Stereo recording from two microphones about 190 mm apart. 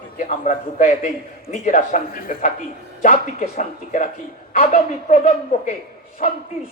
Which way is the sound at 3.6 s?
40° left (ahead or behind).